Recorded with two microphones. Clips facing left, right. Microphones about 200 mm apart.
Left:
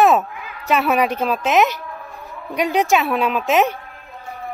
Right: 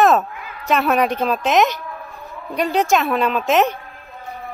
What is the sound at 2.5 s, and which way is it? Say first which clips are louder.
Speech: even; 10° left (ahead or behind).